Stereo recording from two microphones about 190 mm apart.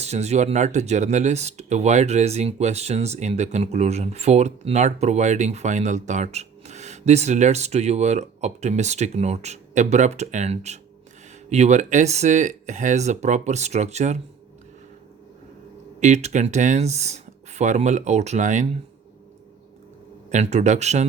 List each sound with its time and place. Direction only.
0.0 s speech: 35° right (ahead or behind)
16.0 s speech: 35° right (ahead or behind)
20.3 s speech: 35° right (ahead or behind)